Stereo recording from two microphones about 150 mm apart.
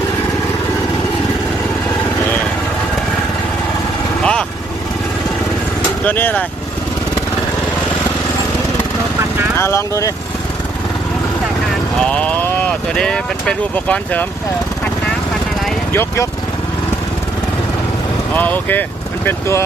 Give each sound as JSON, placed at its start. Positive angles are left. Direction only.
{"t": 4.2, "sound": "vehicle", "side_deg": 5}
{"t": 6.1, "sound": "speech", "side_deg": 10}
{"t": 9.6, "sound": "speech", "side_deg": 20}
{"t": 11.9, "sound": "vehicle", "side_deg": 5}
{"t": 15.9, "sound": "speech", "side_deg": 15}
{"t": 18.3, "sound": "speech", "side_deg": 10}